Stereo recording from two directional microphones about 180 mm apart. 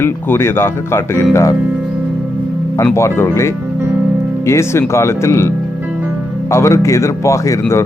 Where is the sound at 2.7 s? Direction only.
15° left (ahead or behind).